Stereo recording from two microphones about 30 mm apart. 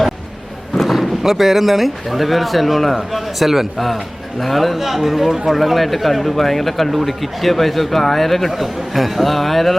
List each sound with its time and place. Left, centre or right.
0.8 s speech: centre